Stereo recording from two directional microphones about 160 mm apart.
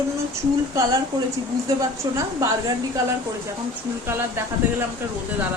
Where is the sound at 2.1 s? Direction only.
20° right (ahead or behind).